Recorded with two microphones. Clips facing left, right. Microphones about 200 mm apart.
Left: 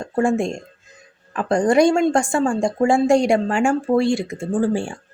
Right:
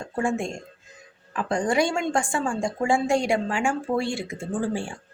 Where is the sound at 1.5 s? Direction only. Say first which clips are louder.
Left 8 dB; 45° left (ahead or behind).